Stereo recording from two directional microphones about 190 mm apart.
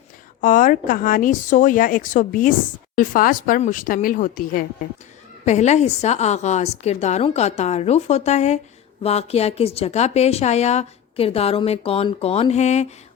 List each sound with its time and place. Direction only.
0.4 s a woman's voice: 45° left (ahead or behind)